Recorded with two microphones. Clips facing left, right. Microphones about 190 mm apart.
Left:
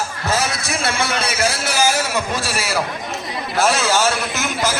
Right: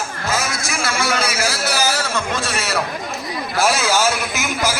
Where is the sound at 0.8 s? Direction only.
60° left (ahead or behind).